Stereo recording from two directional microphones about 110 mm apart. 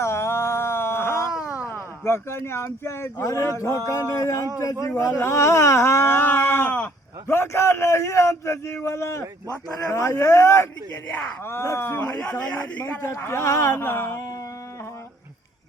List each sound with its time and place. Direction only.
0.0 s a sound: 25° left (ahead or behind)
1.7 s a man's voice: 25° left (ahead or behind)
12.3 s a man's voice: 30° left (ahead or behind)
12.6 s a man's voice: 15° left (ahead or behind)